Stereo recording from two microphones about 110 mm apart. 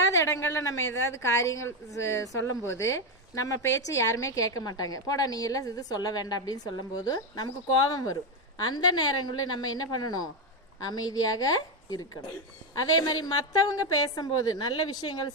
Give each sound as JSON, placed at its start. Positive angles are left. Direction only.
{"t": 0.0, "sound": "a woman's voice", "side_deg": 30}